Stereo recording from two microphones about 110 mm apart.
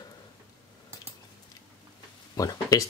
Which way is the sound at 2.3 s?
30° left (ahead or behind).